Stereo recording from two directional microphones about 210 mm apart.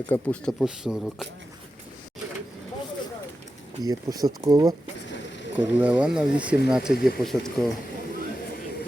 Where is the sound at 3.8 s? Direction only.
15° right (ahead or behind).